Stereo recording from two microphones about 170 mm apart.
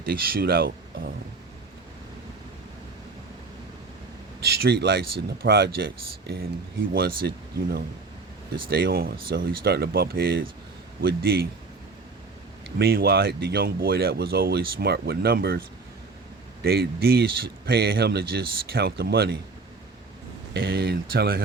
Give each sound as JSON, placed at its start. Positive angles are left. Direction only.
{"t": 0.0, "sound": "speech", "side_deg": -60}
{"t": 4.4, "sound": "speech", "side_deg": -70}
{"t": 12.6, "sound": "speech", "side_deg": -65}
{"t": 16.6, "sound": "speech", "side_deg": -65}
{"t": 20.5, "sound": "speech", "side_deg": -75}